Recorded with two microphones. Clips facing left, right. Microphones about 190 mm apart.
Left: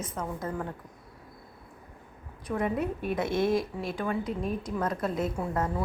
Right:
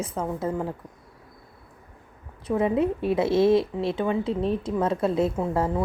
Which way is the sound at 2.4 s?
25° right (ahead or behind).